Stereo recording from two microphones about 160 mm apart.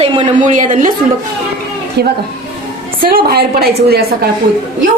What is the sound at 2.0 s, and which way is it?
Speech, 90° right.